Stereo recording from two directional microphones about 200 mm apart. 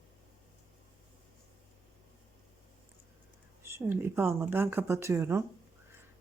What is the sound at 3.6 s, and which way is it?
Speech, 10° right (ahead or behind).